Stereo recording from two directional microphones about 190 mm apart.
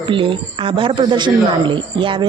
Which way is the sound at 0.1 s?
25° right (ahead or behind).